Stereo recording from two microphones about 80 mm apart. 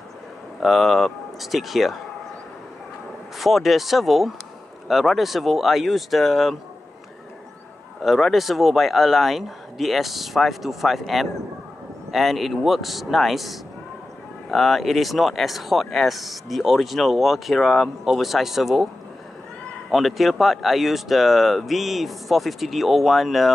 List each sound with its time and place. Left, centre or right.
0.6 s speech: centre
3.3 s speech: centre
8.0 s speech: centre
19.9 s speech: centre